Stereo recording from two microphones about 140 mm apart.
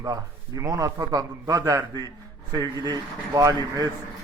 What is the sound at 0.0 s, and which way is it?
A man's voice, 25° right (ahead or behind).